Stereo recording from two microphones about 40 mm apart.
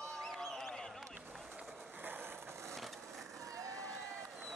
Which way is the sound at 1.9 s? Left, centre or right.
Right.